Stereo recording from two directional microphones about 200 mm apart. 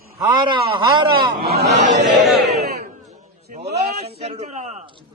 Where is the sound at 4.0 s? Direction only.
30° right (ahead or behind).